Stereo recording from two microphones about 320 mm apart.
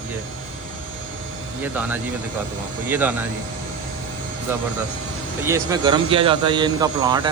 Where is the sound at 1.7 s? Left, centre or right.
Centre.